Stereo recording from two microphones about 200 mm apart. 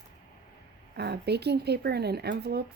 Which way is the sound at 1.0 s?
55° right (ahead or behind).